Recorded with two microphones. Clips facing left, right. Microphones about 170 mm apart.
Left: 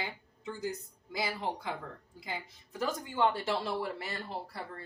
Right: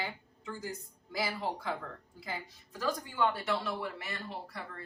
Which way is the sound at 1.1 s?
20° left (ahead or behind).